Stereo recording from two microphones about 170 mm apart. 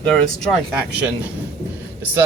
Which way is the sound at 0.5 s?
5° right (ahead or behind).